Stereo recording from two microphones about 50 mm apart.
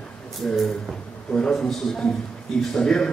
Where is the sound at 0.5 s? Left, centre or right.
Centre.